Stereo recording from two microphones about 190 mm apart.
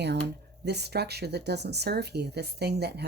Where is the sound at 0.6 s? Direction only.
60° right (ahead or behind).